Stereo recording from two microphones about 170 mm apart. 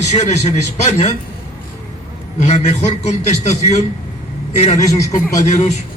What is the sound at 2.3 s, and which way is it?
A man's voice, 40° left (ahead or behind).